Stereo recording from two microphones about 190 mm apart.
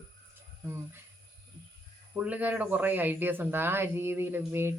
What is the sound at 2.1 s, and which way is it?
Speech, 5° right (ahead or behind).